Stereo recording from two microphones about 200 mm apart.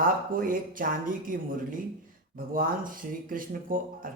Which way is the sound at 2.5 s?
45° right (ahead or behind).